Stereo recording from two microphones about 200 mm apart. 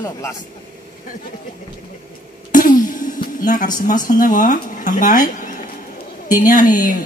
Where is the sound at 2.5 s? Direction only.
45° left (ahead or behind).